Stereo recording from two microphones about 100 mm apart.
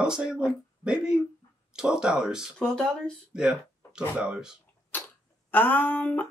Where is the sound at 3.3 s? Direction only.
10° right (ahead or behind).